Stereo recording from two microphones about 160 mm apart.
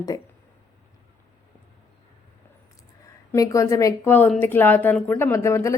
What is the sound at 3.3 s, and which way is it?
A woman's voice, 20° left (ahead or behind).